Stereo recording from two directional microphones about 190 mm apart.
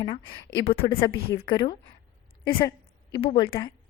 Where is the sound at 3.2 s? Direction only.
30° left (ahead or behind).